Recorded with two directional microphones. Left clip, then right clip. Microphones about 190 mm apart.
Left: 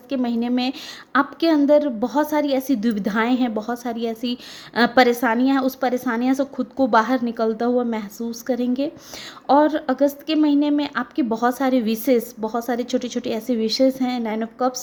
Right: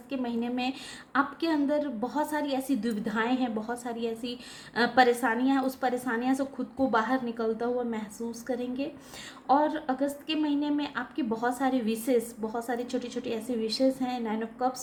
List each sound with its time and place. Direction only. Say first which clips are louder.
0.1 s a woman's voice: left 9 dB; 50° left (ahead or behind)